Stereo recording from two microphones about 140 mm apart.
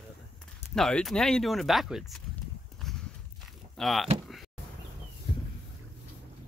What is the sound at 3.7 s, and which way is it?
Speech, centre (ahead or behind).